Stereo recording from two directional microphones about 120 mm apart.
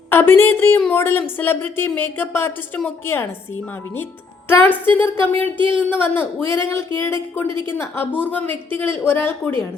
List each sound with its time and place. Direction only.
0.1 s a woman's voice: 20° left (ahead or behind)
4.4 s a woman's voice: 20° left (ahead or behind)
5.4 s speech: 45° right (ahead or behind)
5.9 s a woman's voice: 15° left (ahead or behind)